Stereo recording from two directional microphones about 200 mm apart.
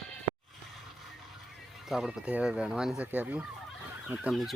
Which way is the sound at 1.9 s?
5° right (ahead or behind).